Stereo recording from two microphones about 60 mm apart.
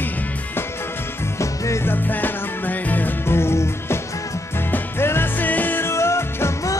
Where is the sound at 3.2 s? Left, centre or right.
Left.